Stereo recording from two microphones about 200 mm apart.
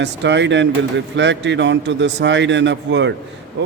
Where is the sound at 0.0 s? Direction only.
60° right (ahead or behind).